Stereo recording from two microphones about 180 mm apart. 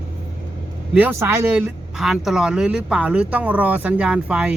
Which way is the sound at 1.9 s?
Centre (ahead or behind).